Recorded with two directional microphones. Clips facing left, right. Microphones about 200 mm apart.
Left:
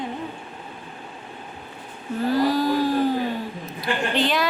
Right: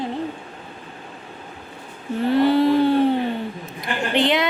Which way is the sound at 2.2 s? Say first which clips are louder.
Right 4 dB; 25° right (ahead or behind).